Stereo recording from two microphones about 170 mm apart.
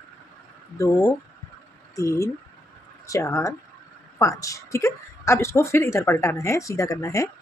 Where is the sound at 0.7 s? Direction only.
20° left (ahead or behind).